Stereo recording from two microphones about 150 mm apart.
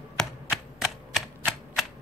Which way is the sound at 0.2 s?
Centre (ahead or behind).